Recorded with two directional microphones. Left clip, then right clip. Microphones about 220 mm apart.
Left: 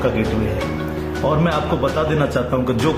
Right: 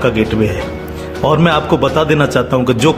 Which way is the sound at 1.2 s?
45° right (ahead or behind).